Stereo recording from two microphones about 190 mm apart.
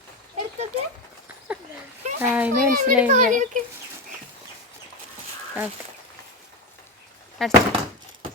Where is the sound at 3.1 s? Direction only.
40° right (ahead or behind).